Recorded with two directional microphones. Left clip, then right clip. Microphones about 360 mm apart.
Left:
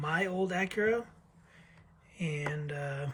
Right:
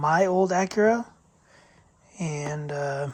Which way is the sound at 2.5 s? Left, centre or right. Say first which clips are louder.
Right 9 dB; right.